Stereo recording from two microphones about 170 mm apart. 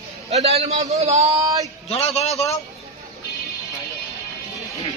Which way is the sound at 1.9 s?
35° left (ahead or behind).